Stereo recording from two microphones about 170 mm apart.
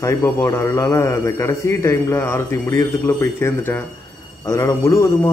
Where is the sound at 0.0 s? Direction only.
15° left (ahead or behind).